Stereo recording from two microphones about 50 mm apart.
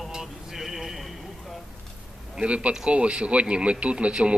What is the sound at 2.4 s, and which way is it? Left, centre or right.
A man's voice, right.